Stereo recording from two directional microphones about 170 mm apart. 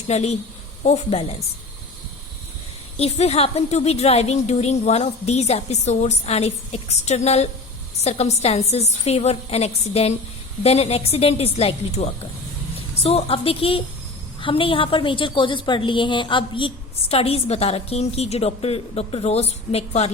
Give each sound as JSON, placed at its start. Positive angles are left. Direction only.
{"t": 0.1, "sound": "a woman's voice", "side_deg": 40}
{"t": 3.0, "sound": "a woman's voice", "side_deg": 35}